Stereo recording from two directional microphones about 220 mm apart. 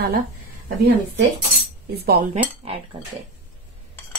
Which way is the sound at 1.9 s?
45° right (ahead or behind).